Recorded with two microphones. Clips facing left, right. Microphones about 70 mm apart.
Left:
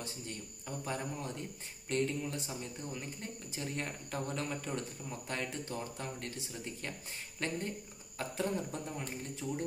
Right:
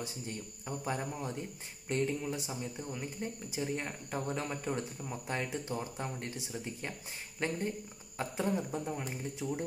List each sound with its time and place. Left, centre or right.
0.7 s speech: right